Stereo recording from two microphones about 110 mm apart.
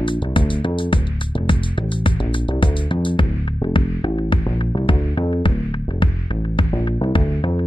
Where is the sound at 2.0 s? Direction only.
50° left (ahead or behind).